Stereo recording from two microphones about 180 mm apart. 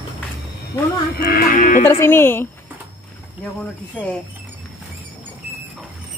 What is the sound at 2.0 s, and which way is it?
Speech, 10° left (ahead or behind).